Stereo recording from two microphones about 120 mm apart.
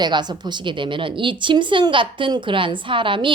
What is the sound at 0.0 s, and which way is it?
A woman's voice, 35° right (ahead or behind).